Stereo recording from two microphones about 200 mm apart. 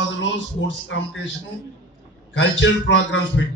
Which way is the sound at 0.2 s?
70° left (ahead or behind).